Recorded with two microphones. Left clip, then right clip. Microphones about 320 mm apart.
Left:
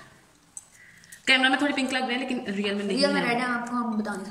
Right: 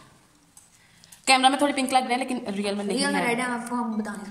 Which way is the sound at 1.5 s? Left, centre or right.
Centre.